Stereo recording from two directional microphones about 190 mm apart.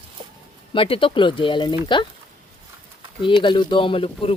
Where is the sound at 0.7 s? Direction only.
30° left (ahead or behind).